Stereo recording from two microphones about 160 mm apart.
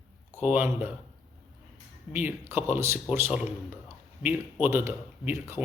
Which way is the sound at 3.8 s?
10° right (ahead or behind).